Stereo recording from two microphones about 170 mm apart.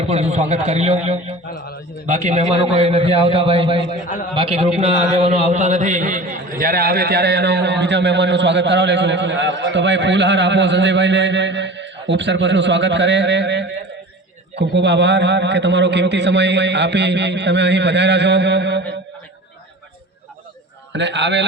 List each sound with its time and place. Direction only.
0.0 s a man's voice: 40° right (ahead or behind); by 18.9 s 90° right
20.9 s a man's voice: 90° right